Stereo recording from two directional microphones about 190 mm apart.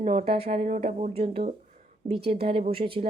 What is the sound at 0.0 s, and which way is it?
A woman's voice, 35° right (ahead or behind).